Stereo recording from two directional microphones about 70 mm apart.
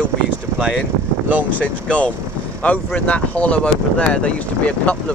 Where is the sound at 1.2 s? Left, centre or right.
Right.